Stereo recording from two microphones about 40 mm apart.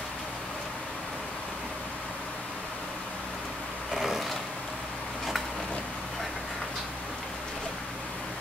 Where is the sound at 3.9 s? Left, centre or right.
Centre.